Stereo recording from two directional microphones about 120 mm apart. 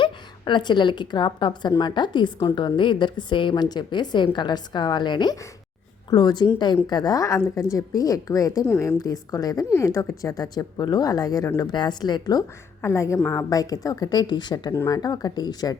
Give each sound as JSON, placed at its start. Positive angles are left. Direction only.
{"t": 0.0, "sound": "a woman's voice", "side_deg": 40}